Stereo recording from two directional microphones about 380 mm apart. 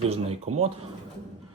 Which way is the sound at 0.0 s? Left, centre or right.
Centre.